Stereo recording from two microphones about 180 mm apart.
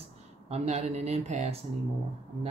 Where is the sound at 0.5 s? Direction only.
35° right (ahead or behind).